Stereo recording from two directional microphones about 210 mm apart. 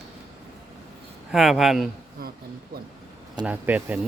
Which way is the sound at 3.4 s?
10° right (ahead or behind).